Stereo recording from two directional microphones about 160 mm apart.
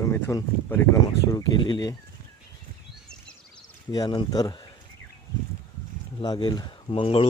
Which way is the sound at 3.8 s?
25° left (ahead or behind).